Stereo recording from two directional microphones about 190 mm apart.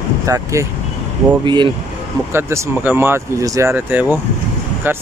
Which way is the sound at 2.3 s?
10° right (ahead or behind).